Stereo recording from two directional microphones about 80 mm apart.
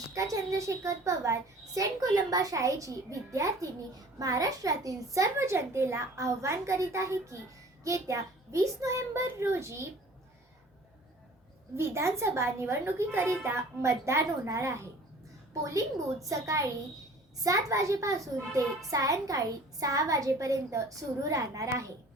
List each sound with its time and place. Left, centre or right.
0.1 s a child's voice: right
11.8 s a child's voice: right
16.3 s a child's voice: right